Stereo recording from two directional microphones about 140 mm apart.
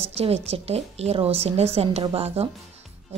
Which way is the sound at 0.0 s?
45° right (ahead or behind).